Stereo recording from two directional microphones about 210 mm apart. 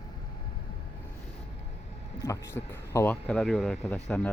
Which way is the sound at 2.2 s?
15° left (ahead or behind).